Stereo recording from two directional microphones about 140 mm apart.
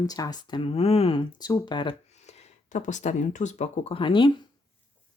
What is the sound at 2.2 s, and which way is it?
Speech, 50° left (ahead or behind).